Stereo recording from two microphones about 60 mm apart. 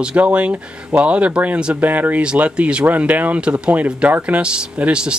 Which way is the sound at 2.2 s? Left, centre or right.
Centre.